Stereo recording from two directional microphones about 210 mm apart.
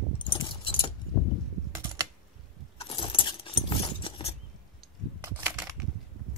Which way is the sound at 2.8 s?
25° left (ahead or behind).